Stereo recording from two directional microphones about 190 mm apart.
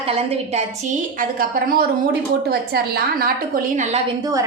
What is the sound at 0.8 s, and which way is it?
A woman's voice, 45° right (ahead or behind).